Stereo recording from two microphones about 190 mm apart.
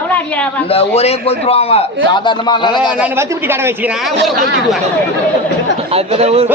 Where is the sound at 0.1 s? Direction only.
5° left (ahead or behind).